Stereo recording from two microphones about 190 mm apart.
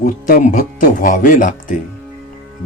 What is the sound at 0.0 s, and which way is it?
Speech, 45° left (ahead or behind).